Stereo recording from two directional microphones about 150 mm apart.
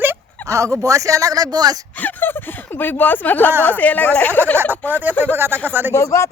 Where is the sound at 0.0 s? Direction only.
15° right (ahead or behind).